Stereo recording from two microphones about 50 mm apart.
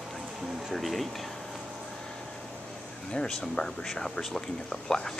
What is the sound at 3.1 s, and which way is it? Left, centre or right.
Speech, centre.